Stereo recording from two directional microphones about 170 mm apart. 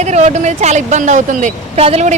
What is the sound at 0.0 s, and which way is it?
Speech, 40° right (ahead or behind).